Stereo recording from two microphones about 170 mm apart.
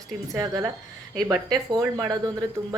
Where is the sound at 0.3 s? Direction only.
20° right (ahead or behind).